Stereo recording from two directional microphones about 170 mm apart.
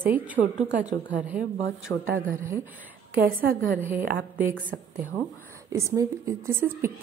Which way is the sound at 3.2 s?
60° right (ahead or behind).